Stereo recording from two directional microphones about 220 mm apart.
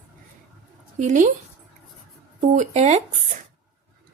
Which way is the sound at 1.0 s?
35° right (ahead or behind).